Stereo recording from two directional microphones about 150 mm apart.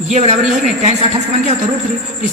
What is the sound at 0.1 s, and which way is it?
Speech, 45° right (ahead or behind).